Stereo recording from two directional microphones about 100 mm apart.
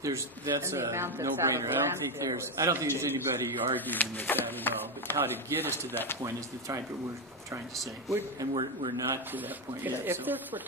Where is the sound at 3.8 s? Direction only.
20° left (ahead or behind).